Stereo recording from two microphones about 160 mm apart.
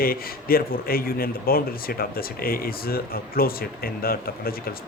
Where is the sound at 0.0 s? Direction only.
65° left (ahead or behind).